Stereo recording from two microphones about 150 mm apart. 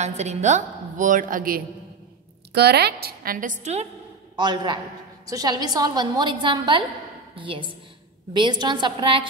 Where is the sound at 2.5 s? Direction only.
90° right; by 3.8 s 55° right (ahead or behind).